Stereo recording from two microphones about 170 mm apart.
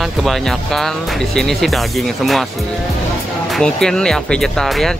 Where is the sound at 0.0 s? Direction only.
Centre (ahead or behind).